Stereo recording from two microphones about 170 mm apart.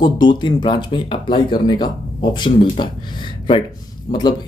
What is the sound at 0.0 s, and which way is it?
Speech, 25° left (ahead or behind).